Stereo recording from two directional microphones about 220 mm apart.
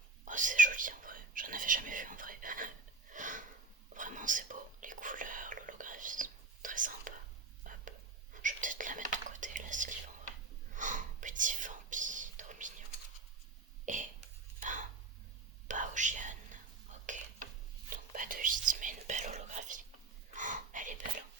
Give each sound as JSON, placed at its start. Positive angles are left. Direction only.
{"t": 0.3, "sound": "whispering", "side_deg": -35}
{"t": 13.8, "sound": "cough", "side_deg": -35}
{"t": 14.6, "sound": "a sound", "side_deg": -35}
{"t": 15.6, "sound": "whispering", "side_deg": -35}